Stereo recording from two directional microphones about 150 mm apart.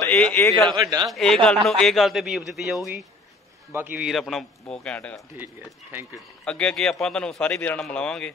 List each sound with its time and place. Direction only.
0.0 s a man's voice: 10° left (ahead or behind)
0.7 s a man's voice: 25° right (ahead or behind)
1.1 s speech: centre (ahead or behind)
3.7 s speech: 10° right (ahead or behind)
4.1 s speech: centre (ahead or behind)
5.4 s speech: 15° right (ahead or behind)
6.4 s speech: 5° left (ahead or behind)